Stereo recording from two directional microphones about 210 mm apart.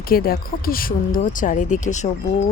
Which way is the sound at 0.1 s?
45° left (ahead or behind).